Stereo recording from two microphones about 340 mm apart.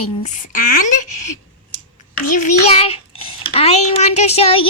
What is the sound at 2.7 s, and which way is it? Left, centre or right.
Child singing, centre.